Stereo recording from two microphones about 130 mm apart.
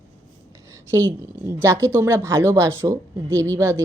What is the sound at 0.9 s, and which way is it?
A woman's voice, 25° right (ahead or behind).